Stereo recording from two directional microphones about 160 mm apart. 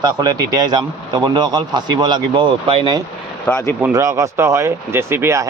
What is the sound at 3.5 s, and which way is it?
Speech, 15° left (ahead or behind).